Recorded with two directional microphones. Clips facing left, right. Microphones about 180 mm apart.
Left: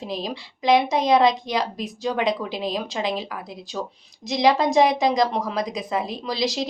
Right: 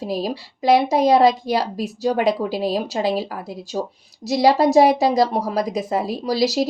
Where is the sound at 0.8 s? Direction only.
35° right (ahead or behind).